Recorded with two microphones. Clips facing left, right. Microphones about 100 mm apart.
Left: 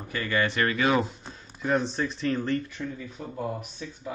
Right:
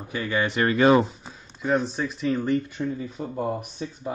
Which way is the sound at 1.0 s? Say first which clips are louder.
Right 1 dB; 5° right (ahead or behind).